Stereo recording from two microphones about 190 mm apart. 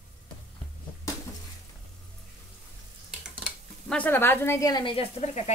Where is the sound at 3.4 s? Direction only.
5° left (ahead or behind).